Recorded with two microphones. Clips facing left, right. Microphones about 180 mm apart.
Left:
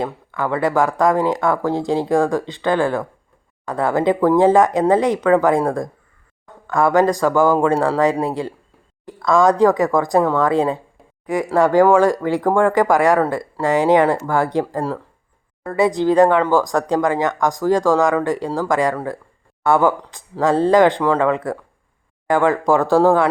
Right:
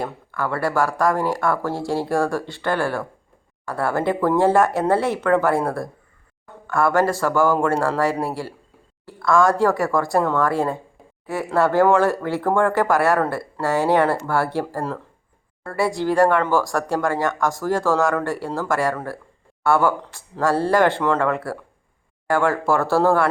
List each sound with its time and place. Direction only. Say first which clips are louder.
0.0 s speech: left 3 dB; 20° left (ahead or behind)